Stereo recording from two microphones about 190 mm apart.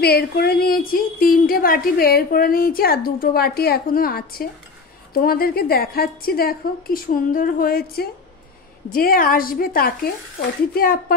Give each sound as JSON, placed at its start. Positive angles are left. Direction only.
{"t": 0.0, "sound": "a woman's voice", "side_deg": 55}